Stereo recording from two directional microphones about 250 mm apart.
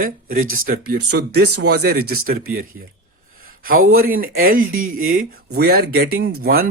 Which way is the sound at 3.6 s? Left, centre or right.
Right.